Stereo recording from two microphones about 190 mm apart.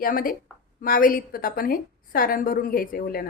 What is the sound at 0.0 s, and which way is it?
A woman's voice, 50° left (ahead or behind).